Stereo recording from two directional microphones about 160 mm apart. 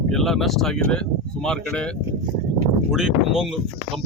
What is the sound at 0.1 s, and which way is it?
Speech, centre (ahead or behind).